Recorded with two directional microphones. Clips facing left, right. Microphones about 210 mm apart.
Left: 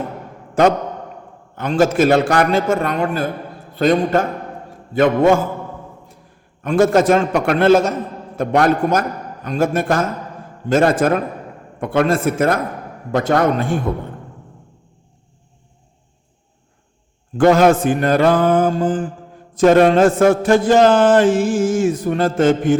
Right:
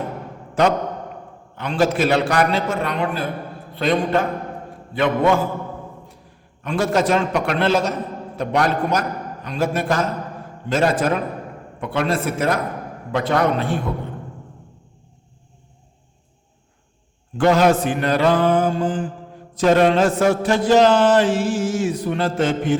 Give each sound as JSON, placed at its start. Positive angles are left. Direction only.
{"t": 1.5, "sound": "mantra", "side_deg": 45}
{"t": 6.6, "sound": "mantra", "side_deg": 50}
{"t": 17.3, "sound": "mantra", "side_deg": 50}